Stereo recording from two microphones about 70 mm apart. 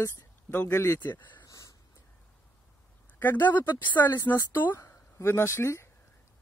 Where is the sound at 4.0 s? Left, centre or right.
Left.